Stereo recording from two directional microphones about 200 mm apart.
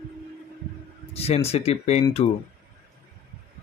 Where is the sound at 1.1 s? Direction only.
30° left (ahead or behind).